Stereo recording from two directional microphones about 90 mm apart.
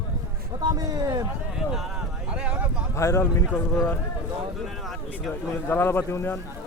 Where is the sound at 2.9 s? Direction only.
30° left (ahead or behind).